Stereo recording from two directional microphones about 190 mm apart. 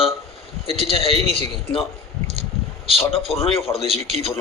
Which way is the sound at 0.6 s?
30° left (ahead or behind).